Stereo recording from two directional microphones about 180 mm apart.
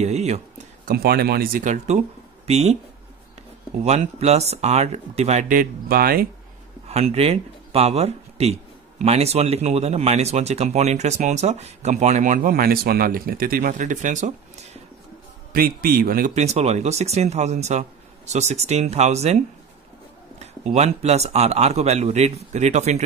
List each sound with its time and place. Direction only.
0.0 s speech: 40° right (ahead or behind)
0.8 s speech: 60° right (ahead or behind); by 2.8 s 35° right (ahead or behind)
3.8 s speech: 35° right (ahead or behind); by 6.2 s 55° right (ahead or behind)
6.9 s speech: 35° right (ahead or behind)
15.5 s a man's voice: 55° right (ahead or behind)
16.3 s speech: 35° right (ahead or behind)